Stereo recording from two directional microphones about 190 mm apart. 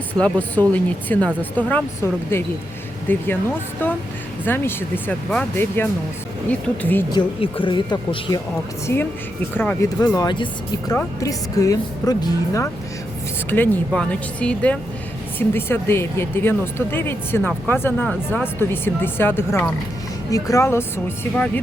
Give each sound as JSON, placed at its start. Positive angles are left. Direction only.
{"t": 0.2, "sound": "speech", "side_deg": 10}
{"t": 4.4, "sound": "speech", "side_deg": 10}
{"t": 7.1, "sound": "a woman's voice", "side_deg": 25}
{"t": 8.9, "sound": "speech", "side_deg": 10}
{"t": 10.2, "sound": "a woman's voice", "side_deg": 25}